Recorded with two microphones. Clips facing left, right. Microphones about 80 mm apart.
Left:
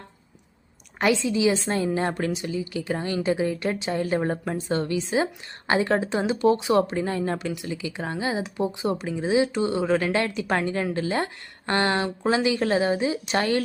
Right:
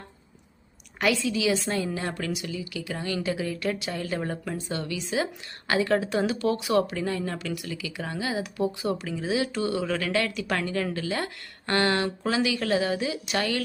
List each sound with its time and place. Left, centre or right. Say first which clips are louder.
0.9 s a woman's voice: left 3 dB; left